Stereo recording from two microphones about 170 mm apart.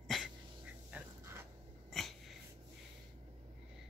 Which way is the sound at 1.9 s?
Centre (ahead or behind).